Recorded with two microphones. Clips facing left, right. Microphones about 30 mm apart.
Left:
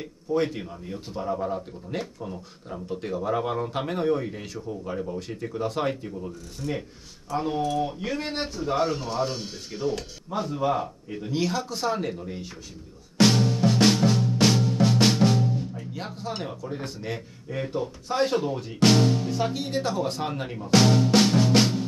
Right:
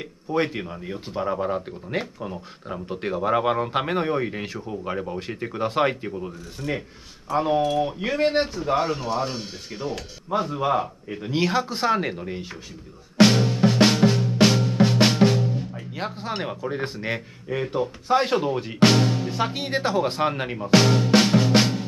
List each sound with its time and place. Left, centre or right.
0.0 s speech: right
13.2 s music: centre
15.7 s speech: right
18.8 s music: centre
19.3 s speech: right
20.6 s music: centre